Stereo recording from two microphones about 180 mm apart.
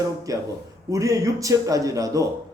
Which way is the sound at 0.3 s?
20° right (ahead or behind).